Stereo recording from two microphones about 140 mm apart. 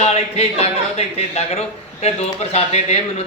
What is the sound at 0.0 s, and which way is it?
Speech, 45° left (ahead or behind).